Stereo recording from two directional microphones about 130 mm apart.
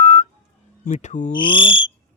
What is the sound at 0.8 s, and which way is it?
Cricket, 65° left (ahead or behind).